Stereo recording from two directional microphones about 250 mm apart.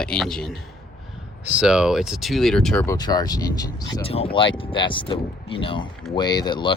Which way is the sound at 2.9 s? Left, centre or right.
Centre.